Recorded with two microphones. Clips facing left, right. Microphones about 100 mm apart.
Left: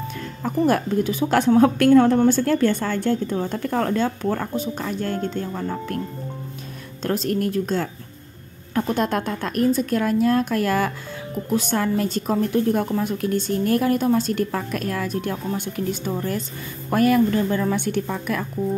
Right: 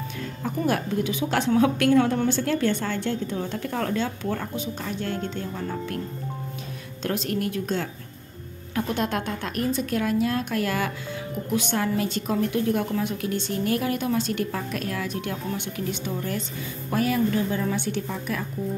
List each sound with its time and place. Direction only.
0.4 s a woman's voice: 45° left (ahead or behind)
7.0 s a woman's voice: 40° left (ahead or behind)
16.9 s a woman's voice: 55° left (ahead or behind)